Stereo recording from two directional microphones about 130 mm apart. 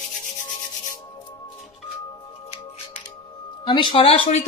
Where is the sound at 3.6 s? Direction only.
40° left (ahead or behind).